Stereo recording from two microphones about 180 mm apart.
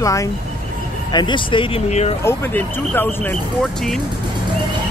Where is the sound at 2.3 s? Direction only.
10° left (ahead or behind).